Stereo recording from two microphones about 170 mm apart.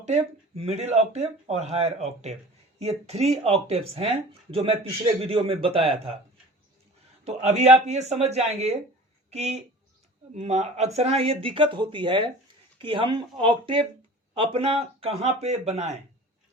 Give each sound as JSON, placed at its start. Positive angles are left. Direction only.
{"t": 0.0, "sound": "speech", "side_deg": -35}
{"t": 7.3, "sound": "speech", "side_deg": -40}